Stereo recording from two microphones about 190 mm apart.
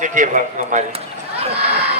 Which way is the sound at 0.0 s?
40° right (ahead or behind).